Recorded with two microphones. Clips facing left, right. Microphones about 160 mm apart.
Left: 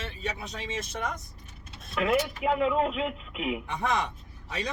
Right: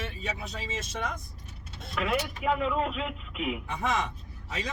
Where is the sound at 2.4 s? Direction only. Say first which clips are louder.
Left 3 dB; 20° left (ahead or behind).